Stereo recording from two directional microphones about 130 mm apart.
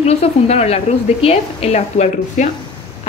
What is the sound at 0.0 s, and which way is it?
A woman's voice, 55° left (ahead or behind).